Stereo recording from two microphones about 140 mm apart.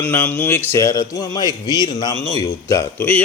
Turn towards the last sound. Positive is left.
turn(degrees=15)  # may be behind; listen again after turning